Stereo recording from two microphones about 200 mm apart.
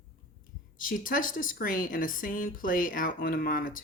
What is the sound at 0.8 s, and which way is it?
Speech, 45° left (ahead or behind).